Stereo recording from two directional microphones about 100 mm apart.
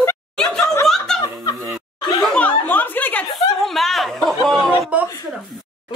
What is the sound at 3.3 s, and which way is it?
Chatter, centre (ahead or behind).